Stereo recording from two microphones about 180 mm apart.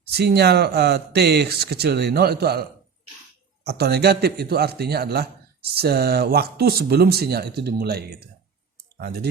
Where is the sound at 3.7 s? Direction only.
65° right (ahead or behind).